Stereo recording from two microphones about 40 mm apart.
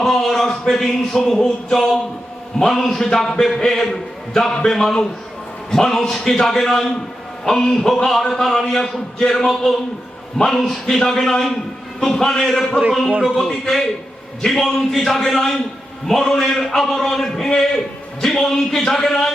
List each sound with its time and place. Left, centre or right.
0.0 s a man's voice: centre